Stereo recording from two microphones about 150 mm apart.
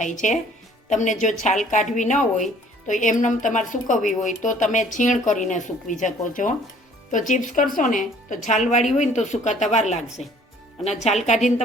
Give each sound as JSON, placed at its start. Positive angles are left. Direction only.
{"t": 0.0, "sound": "a woman's voice", "side_deg": 55}